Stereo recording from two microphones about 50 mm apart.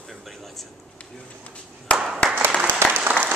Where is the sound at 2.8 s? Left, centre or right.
Right.